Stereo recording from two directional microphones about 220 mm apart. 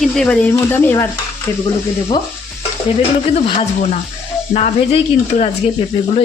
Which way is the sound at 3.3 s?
30° left (ahead or behind).